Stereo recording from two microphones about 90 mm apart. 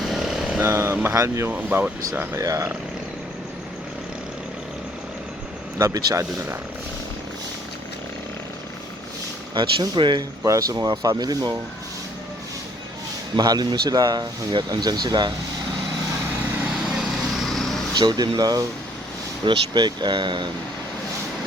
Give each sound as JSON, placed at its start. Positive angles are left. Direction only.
{"t": 0.0, "sound": "vehicle", "side_deg": -5}
{"t": 0.6, "sound": "speech", "side_deg": -25}
{"t": 1.1, "sound": "speech", "side_deg": -40}
{"t": 1.5, "sound": "speech", "side_deg": -20}
{"t": 2.4, "sound": "speech", "side_deg": -40}
{"t": 5.8, "sound": "speech", "side_deg": -40}
{"t": 9.9, "sound": "speech", "side_deg": -55}
{"t": 10.4, "sound": "speech", "side_deg": -40}
{"t": 13.3, "sound": "speech", "side_deg": -50}
{"t": 16.6, "sound": "vehicle", "side_deg": -10}
{"t": 17.9, "sound": "speech", "side_deg": -55}